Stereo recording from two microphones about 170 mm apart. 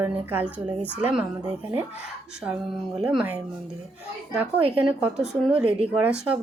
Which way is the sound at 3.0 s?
Centre (ahead or behind).